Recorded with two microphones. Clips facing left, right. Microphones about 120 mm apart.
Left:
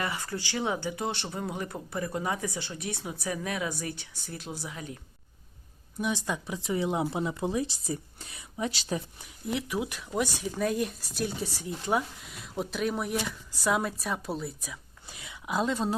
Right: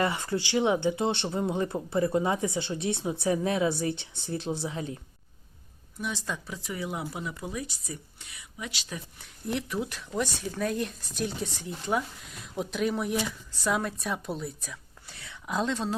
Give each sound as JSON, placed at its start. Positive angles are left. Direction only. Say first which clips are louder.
{"t": 0.0, "sound": "speech", "louder": "right 5 dB", "side_deg": -25}
{"t": 6.0, "sound": "speech", "louder": "left 3 dB", "side_deg": 15}
{"t": 9.5, "sound": "speech", "louder": "even", "side_deg": 0}
{"t": 9.7, "sound": "speech", "louder": "left 1 dB", "side_deg": 15}
{"t": 14.6, "sound": "speech", "louder": "left 1 dB", "side_deg": 15}